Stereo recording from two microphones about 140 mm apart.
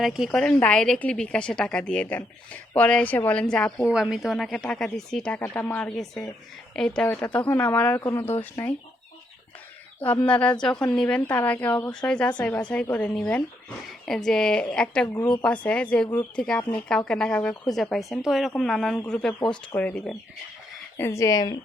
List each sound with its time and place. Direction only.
0.0 s a woman's voice: centre (ahead or behind)
3.8 s a woman's voice: 5° right (ahead or behind); by 8.7 s 15° left (ahead or behind)
10.2 s a woman's voice: 10° left (ahead or behind); by 21.6 s 25° left (ahead or behind)